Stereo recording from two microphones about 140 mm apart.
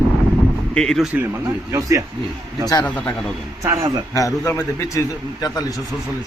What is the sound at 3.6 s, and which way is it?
Speech, 25° right (ahead or behind).